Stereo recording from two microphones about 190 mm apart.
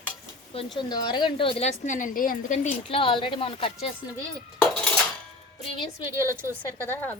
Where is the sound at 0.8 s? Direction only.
20° left (ahead or behind); by 2.6 s 45° left (ahead or behind).